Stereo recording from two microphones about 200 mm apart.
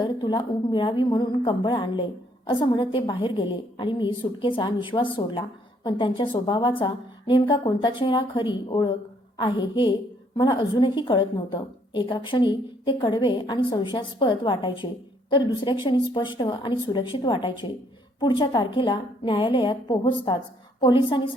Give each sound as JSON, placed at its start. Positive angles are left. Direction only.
{"t": 0.0, "sound": "a woman's voice", "side_deg": 20}